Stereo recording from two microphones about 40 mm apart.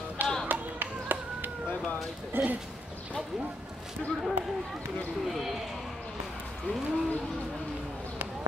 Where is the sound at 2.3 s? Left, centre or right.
Right.